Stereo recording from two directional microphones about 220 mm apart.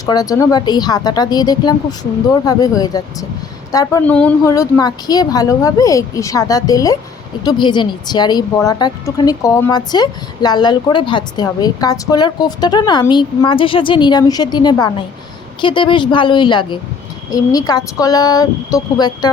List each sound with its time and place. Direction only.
0.0 s a woman's voice: 15° left (ahead or behind)